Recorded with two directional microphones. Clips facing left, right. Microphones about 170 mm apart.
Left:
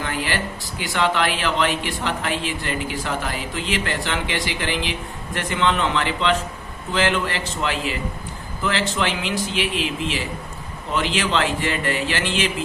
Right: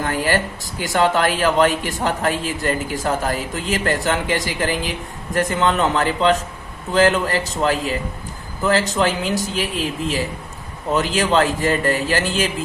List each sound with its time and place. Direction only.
0.0 s speech: 45° right (ahead or behind)